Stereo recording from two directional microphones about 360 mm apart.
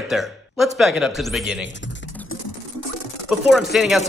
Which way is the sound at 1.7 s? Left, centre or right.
Left.